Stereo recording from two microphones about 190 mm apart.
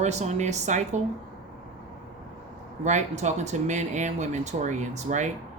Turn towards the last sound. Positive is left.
turn(degrees=-40)  # may be behind; listen again after turning